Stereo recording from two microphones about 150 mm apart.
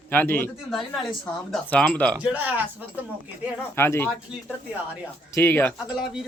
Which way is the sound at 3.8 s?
15° left (ahead or behind).